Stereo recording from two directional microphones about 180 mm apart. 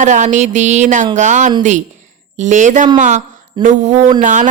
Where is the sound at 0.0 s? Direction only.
45° right (ahead or behind).